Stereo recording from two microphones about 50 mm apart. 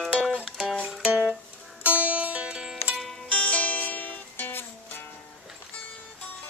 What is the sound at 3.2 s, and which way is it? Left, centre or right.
Music, left.